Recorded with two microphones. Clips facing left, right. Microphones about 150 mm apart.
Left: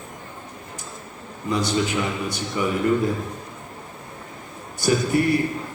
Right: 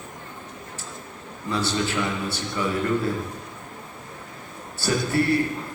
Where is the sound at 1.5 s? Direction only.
15° left (ahead or behind).